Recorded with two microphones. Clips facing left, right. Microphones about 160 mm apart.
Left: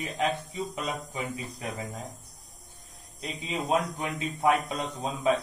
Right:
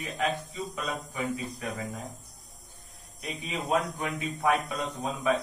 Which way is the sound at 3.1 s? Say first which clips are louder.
Left 2 dB; 25° left (ahead or behind).